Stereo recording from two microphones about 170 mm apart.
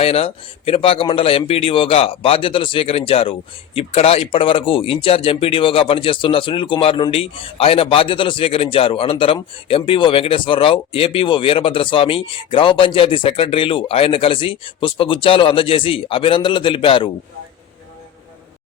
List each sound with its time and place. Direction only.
0.0 s speech: 35° left (ahead or behind)